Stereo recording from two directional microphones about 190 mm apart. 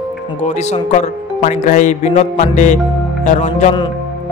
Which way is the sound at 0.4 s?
35° left (ahead or behind).